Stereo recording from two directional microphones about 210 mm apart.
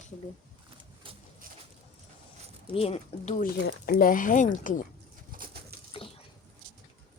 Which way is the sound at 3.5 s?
50° left (ahead or behind).